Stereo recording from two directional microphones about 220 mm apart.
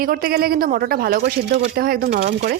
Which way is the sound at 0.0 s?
40° right (ahead or behind).